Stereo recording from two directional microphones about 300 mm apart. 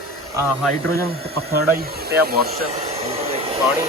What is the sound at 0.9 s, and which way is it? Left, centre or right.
Speech, right.